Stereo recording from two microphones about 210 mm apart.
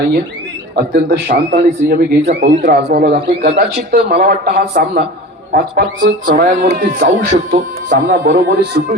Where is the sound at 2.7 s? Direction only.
50° right (ahead or behind).